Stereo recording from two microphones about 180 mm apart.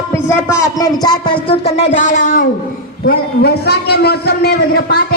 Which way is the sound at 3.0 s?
60° left (ahead or behind).